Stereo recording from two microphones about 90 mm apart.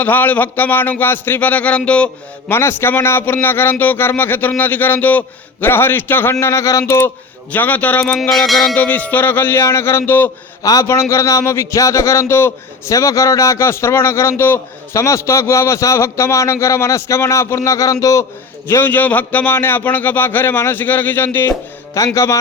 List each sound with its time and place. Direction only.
0.0 s a man's voice: 20° left (ahead or behind)
2.5 s a man's voice: 25° left (ahead or behind)
7.5 s a man's voice: 20° left (ahead or behind)
8.0 s music: 5° left (ahead or behind)
8.7 s a man's voice: 20° left (ahead or behind)
10.6 s a man's voice: 40° left (ahead or behind)
18.7 s a man's voice: 25° left (ahead or behind)
21.9 s a man's voice: 35° left (ahead or behind)